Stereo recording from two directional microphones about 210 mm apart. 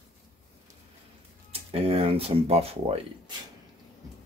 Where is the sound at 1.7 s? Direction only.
25° right (ahead or behind).